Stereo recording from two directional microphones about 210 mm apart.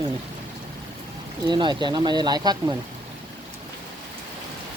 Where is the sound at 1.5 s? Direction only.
20° right (ahead or behind).